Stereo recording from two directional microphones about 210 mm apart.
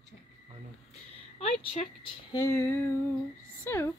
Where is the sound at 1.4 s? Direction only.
25° left (ahead or behind).